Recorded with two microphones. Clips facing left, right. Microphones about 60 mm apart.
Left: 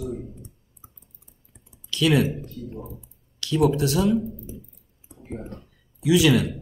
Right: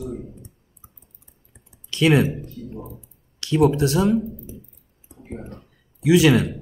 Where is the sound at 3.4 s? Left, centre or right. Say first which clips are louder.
Right 3 dB; right.